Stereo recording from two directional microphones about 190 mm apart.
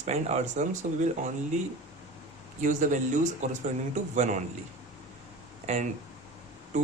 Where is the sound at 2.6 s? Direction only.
40° right (ahead or behind).